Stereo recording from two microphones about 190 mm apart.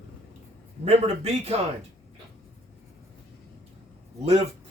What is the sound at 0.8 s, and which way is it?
Speech, 30° right (ahead or behind).